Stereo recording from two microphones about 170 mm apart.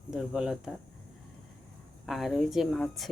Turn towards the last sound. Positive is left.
turn(degrees=0)  # may be behind; listen again after turning